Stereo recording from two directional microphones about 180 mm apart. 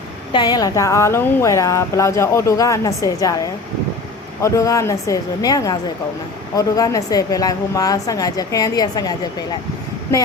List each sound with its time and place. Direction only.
0.3 s a woman's voice: 20° left (ahead or behind)